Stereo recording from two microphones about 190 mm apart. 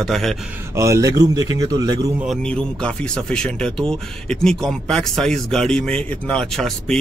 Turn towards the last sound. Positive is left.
turn(degrees=0)  # may be behind; listen again after turning